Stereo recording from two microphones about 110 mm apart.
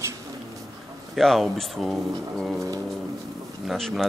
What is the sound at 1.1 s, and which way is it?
Speech, centre (ahead or behind).